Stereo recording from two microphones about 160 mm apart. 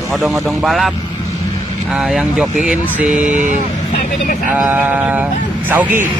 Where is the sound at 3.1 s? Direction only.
50° right (ahead or behind).